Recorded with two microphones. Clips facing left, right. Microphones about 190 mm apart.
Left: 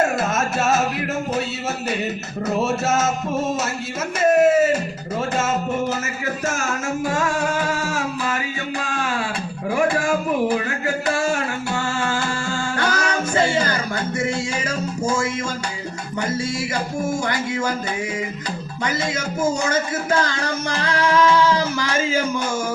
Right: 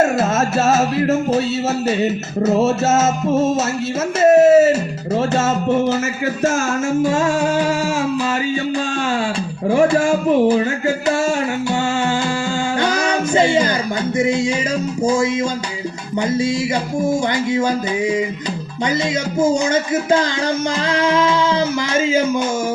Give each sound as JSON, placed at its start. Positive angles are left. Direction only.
{"t": 0.0, "sound": "music", "side_deg": -25}
{"t": 9.6, "sound": "music", "side_deg": -30}
{"t": 12.8, "sound": "music", "side_deg": -20}
{"t": 19.4, "sound": "music", "side_deg": -20}